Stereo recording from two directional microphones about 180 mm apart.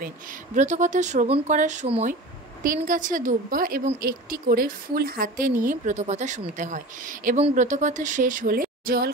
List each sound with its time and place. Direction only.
0.0 s speech: 45° right (ahead or behind)
2.6 s speech: 50° right (ahead or behind)